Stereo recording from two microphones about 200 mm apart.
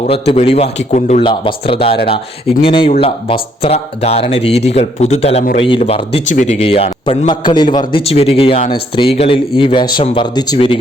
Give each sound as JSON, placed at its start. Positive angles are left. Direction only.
{"t": 0.1, "sound": "speech", "side_deg": 30}
{"t": 1.2, "sound": "a man's voice", "side_deg": 25}